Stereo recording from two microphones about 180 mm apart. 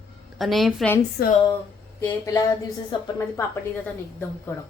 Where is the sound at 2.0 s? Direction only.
20° left (ahead or behind).